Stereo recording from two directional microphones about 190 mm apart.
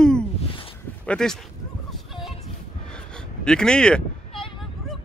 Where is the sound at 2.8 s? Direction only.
5° left (ahead or behind).